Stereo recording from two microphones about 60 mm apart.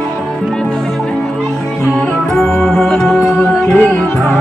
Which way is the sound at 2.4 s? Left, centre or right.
Centre.